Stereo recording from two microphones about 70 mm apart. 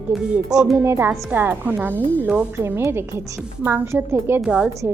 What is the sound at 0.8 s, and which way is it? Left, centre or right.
A woman's voice, right.